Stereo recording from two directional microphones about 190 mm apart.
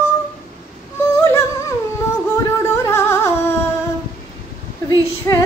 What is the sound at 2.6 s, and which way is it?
Music, 15° left (ahead or behind).